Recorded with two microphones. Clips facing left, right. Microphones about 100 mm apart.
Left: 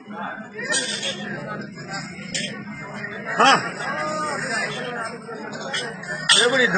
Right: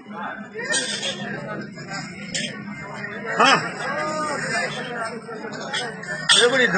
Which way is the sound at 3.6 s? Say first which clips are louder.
Right 1 dB; centre (ahead or behind).